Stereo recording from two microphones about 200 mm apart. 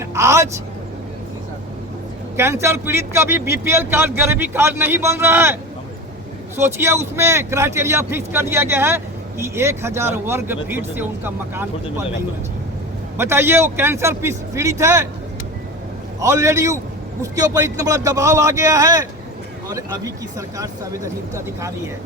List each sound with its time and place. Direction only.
0.0 s vehicle: 15° right (ahead or behind)
2.3 s a man's voice: 15° right (ahead or behind)
6.6 s a man's voice: 10° right (ahead or behind)
13.1 s a man's voice: 10° right (ahead or behind)
16.2 s a man's voice: 15° right (ahead or behind)